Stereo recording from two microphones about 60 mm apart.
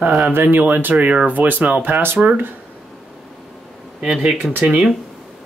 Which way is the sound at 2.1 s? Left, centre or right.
Right.